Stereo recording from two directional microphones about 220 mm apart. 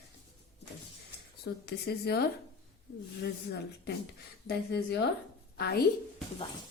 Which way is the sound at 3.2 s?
45° left (ahead or behind).